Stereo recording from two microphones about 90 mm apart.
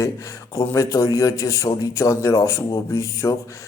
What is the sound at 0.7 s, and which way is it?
Speech, 35° left (ahead or behind).